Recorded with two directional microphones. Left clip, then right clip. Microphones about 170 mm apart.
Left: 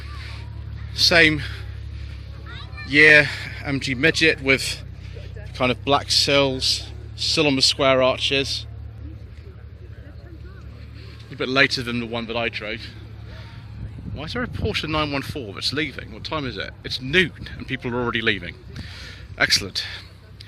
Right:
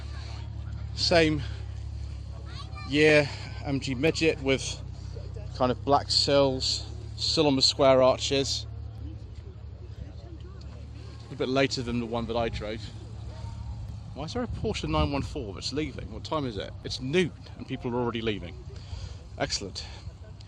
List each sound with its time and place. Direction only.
0.2 s a sound: 15° right (ahead or behind)
0.9 s a man's voice: centre (ahead or behind)
2.8 s a man's voice: centre (ahead or behind)
7.8 s speech: 15° right (ahead or behind)
11.3 s speech: 15° right (ahead or behind)
14.2 s speech: 15° right (ahead or behind)